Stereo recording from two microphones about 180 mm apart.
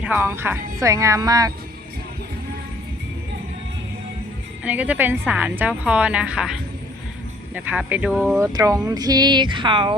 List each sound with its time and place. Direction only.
0.0 s a woman's voice: 10° right (ahead or behind)
4.6 s a woman's voice: 10° right (ahead or behind); by 9.9 s 25° right (ahead or behind)